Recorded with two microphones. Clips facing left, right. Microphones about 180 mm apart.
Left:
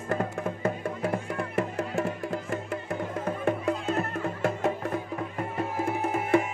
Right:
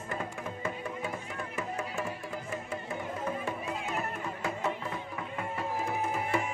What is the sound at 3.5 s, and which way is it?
Music, 55° left (ahead or behind).